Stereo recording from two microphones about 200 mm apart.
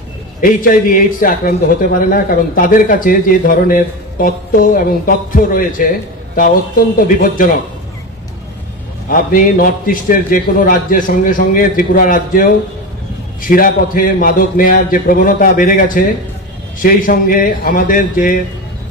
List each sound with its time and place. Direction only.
0.4 s a man's voice: 40° left (ahead or behind)
7.0 s a man's voice: 45° left (ahead or behind)
9.1 s a man's voice: 45° left (ahead or behind)